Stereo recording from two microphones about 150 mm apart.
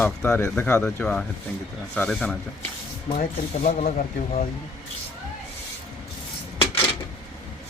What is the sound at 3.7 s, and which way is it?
Speech, 50° left (ahead or behind).